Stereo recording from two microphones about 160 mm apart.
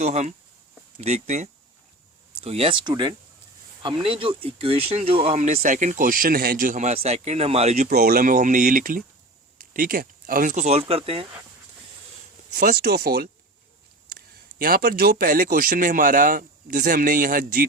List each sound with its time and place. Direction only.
0.0 s speech: 45° right (ahead or behind)
7.9 s speech: 70° right (ahead or behind); by 11.3 s 35° right (ahead or behind)
12.5 s speech: 70° right (ahead or behind)
14.6 s speech: 65° right (ahead or behind)